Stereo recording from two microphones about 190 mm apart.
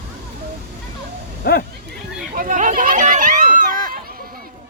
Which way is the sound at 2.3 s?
45° right (ahead or behind).